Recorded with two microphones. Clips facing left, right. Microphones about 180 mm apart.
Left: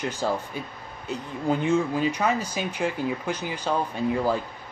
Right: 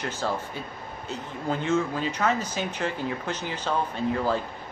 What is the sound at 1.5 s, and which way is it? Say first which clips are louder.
Speech: left 3 dB; 15° left (ahead or behind).